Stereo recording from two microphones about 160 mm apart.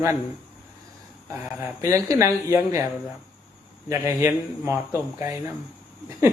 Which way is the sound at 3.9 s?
15° right (ahead or behind).